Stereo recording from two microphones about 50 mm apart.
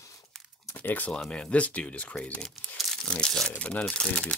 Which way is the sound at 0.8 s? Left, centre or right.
Left.